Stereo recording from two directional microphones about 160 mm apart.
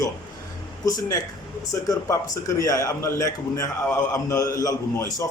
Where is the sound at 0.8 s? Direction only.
20° left (ahead or behind).